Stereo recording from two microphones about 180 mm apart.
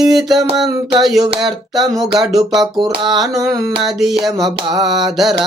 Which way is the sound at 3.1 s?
Centre (ahead or behind).